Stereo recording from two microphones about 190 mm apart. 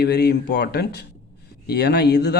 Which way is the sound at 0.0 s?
60° left (ahead or behind).